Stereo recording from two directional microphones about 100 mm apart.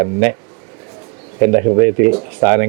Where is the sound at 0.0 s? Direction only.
25° right (ahead or behind).